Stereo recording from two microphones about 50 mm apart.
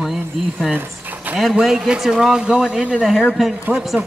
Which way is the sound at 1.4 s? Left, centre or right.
Centre.